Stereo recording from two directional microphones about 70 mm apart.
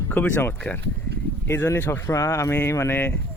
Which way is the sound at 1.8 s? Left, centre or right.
Left.